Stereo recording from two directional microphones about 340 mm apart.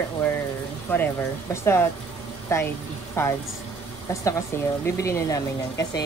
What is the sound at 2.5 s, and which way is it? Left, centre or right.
Speech, centre.